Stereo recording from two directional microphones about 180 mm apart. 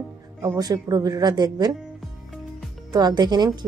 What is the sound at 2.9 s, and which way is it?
Speech, 25° right (ahead or behind).